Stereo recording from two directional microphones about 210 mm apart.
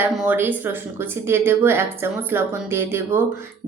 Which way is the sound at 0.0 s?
10° right (ahead or behind).